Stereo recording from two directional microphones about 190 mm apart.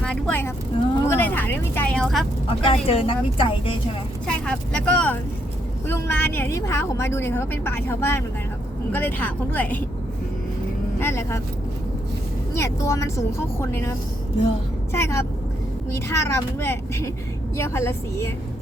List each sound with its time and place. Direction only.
0.0 s vehicle: 5° left (ahead or behind)
1.0 s speech: 10° left (ahead or behind)
2.5 s speech: 30° left (ahead or behind)
4.3 s a woman's voice: 5° left (ahead or behind)
11.0 s a woman's voice: 15° left (ahead or behind)
12.5 s a woman's voice: 15° left (ahead or behind)
14.9 s a woman's voice: 15° left (ahead or behind)